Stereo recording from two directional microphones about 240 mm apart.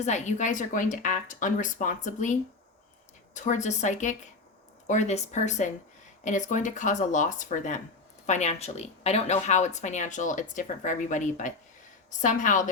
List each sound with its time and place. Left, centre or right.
0.0 s a woman's voice: left